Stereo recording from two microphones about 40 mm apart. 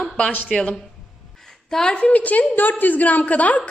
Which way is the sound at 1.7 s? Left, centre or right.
Left.